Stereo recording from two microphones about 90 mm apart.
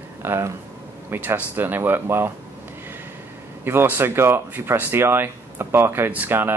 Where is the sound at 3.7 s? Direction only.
25° right (ahead or behind).